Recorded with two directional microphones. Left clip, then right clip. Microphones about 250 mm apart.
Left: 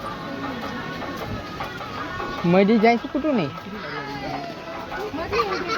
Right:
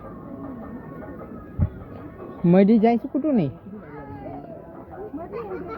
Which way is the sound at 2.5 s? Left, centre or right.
Centre.